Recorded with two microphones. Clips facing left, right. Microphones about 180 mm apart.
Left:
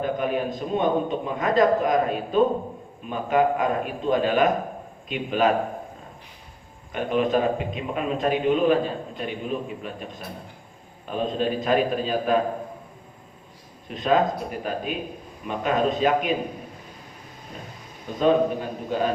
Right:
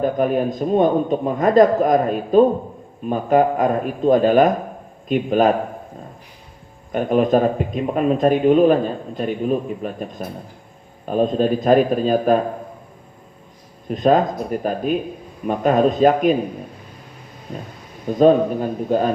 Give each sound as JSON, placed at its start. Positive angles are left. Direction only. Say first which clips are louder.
{"t": 0.0, "sound": "speech", "louder": "right 6 dB", "side_deg": -45}
{"t": 6.9, "sound": "speech", "louder": "right 6 dB", "side_deg": -45}
{"t": 13.8, "sound": "speech", "louder": "right 5 dB", "side_deg": -45}
{"t": 18.2, "sound": "speech", "louder": "right 6 dB", "side_deg": -45}